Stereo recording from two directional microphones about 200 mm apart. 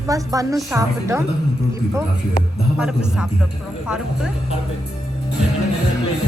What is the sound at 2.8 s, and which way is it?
Speech, 5° right (ahead or behind).